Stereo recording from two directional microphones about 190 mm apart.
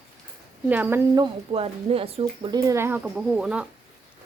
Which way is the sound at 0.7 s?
10° right (ahead or behind).